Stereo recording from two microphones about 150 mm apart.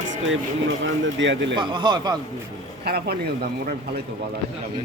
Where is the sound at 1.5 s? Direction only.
30° right (ahead or behind).